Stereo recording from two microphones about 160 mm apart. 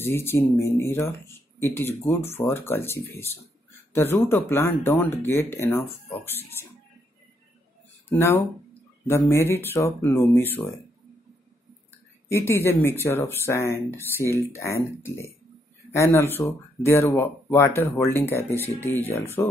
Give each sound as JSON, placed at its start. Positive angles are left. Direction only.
{"t": 0.0, "sound": "speech", "side_deg": 15}
{"t": 8.1, "sound": "speech", "side_deg": 15}
{"t": 12.3, "sound": "speech", "side_deg": 15}